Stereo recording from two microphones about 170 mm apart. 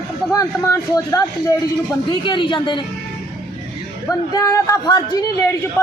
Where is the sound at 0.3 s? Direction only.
20° left (ahead or behind).